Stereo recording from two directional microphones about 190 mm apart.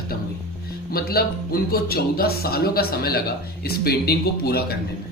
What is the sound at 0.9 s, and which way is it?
Speech, 55° left (ahead or behind).